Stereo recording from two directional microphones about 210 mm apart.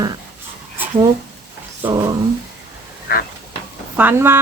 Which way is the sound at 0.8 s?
10° right (ahead or behind).